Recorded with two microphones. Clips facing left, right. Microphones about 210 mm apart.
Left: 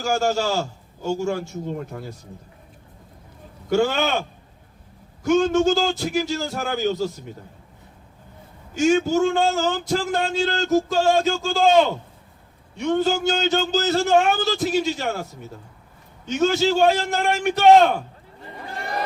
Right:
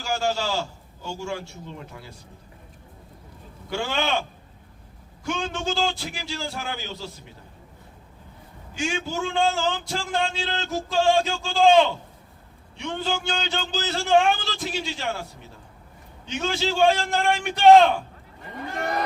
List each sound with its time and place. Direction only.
0.0 s a man's voice: 45° left (ahead or behind)
3.7 s a man's voice: 45° left (ahead or behind)
5.2 s a man's voice: 45° left (ahead or behind)
8.7 s a man's voice: 45° left (ahead or behind)